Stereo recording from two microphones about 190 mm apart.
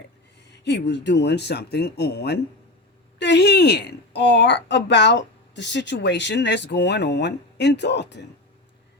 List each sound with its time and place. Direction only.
0.4 s a woman's voice: 65° left (ahead or behind)